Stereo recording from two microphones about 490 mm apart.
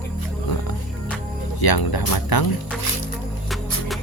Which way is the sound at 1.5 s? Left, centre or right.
Left.